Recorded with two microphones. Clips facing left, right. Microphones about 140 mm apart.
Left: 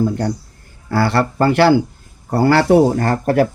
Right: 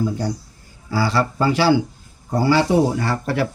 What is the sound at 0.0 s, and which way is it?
Speech, 55° left (ahead or behind).